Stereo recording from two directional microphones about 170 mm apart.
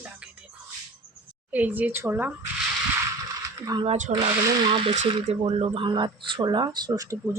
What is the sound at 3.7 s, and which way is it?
Speech, 25° right (ahead or behind).